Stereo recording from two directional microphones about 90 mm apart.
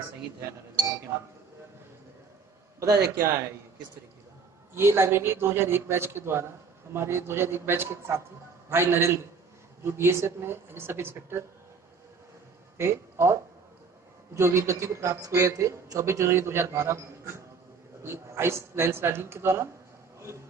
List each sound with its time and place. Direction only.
2.8 s a man's voice: 35° right (ahead or behind)
4.7 s a woman's voice: 30° right (ahead or behind)
12.7 s a man's voice: 30° right (ahead or behind)
20.2 s a sound: 30° right (ahead or behind)